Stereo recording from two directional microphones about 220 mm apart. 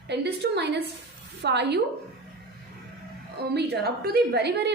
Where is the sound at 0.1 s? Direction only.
50° right (ahead or behind).